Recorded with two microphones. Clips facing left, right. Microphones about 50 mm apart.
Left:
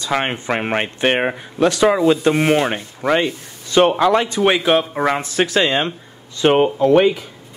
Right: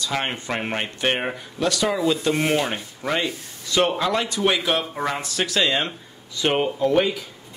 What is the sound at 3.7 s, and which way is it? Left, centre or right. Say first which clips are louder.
Speech: left 7 dB; left.